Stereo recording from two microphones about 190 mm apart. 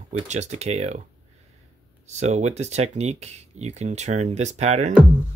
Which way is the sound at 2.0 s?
35° right (ahead or behind).